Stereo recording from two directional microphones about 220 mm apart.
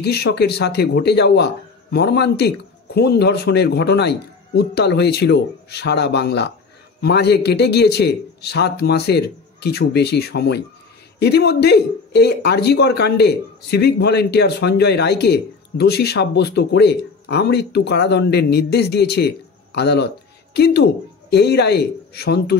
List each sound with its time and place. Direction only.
0.0 s speech: 50° left (ahead or behind)